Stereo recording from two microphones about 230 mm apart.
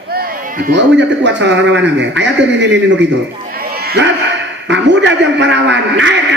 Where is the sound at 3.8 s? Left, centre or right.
Right.